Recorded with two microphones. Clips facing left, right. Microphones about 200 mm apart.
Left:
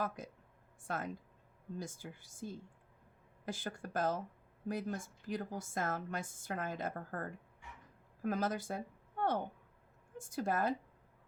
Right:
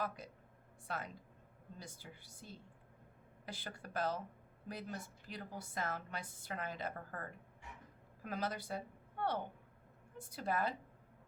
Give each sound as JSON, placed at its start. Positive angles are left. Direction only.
{"t": 0.8, "sound": "a woman's voice", "side_deg": 50}